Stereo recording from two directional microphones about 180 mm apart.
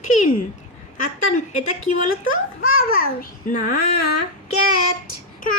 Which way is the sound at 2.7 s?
55° left (ahead or behind).